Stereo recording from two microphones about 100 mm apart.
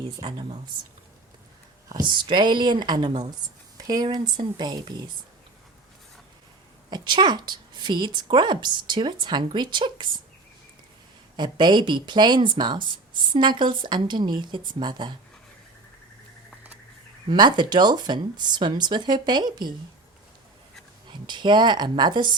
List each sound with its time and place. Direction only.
0.3 s speech: 60° right (ahead or behind)
1.9 s speech: 50° right (ahead or behind)
6.9 s speech: 50° right (ahead or behind)
11.3 s speech: 50° right (ahead or behind)
17.2 s speech: 50° right (ahead or behind)
21.1 s speech: 50° right (ahead or behind)